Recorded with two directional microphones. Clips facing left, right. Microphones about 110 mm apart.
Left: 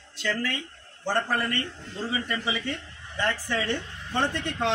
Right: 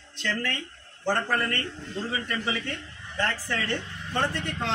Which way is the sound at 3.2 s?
15° left (ahead or behind).